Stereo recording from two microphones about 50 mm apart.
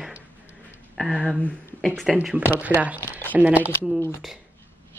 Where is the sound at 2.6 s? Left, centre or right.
Right.